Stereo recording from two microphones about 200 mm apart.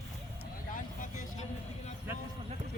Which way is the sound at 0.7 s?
40° left (ahead or behind).